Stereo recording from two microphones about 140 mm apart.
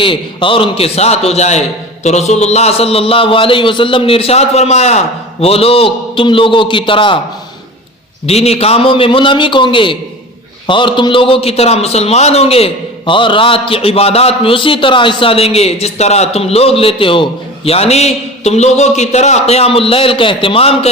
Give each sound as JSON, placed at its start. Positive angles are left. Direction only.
{"t": 0.0, "sound": "a man's voice", "side_deg": 35}
{"t": 8.3, "sound": "a man's voice", "side_deg": 50}